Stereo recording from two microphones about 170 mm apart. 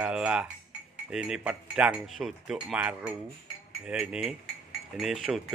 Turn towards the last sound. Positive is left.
turn(degrees=0)  # may be behind; listen again after turning